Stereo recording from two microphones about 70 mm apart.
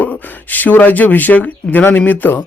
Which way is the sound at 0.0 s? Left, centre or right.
Left.